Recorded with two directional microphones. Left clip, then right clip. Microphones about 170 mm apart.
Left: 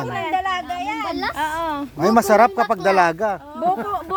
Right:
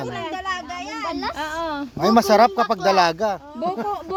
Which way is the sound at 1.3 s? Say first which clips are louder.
Left 3 dB; 45° right (ahead or behind).